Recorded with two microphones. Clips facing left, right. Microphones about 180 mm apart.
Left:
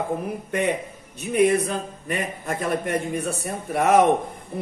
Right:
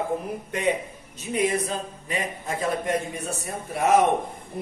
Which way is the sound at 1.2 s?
60° left (ahead or behind).